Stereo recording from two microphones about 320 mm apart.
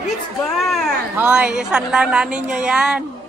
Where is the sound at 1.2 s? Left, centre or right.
Centre.